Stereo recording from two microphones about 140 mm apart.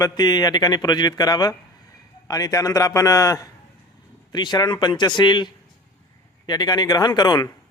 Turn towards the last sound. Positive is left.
turn(degrees=30)  # may be behind; listen again after turning